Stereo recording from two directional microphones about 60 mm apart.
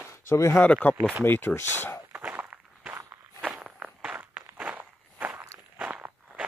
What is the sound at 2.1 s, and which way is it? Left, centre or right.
Walk, right.